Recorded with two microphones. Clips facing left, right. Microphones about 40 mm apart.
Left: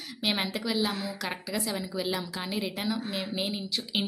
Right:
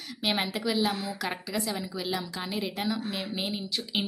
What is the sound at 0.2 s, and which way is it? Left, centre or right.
A woman's voice, centre.